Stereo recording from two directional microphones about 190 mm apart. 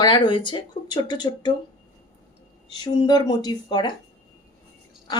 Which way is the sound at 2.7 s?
25° left (ahead or behind).